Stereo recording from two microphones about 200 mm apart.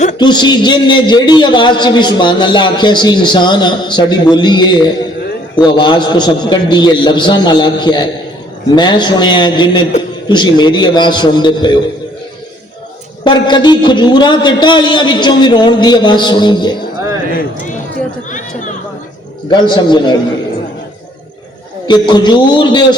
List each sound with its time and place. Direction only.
0.2 s a man's voice: 20° left (ahead or behind)
13.2 s a man's voice: 20° left (ahead or behind)
18.3 s speech: 40° left (ahead or behind)
19.5 s a man's voice: 20° left (ahead or behind)
21.8 s a man's voice: 20° left (ahead or behind)